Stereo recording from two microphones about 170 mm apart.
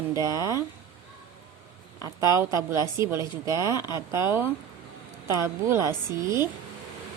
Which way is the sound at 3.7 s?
25° left (ahead or behind).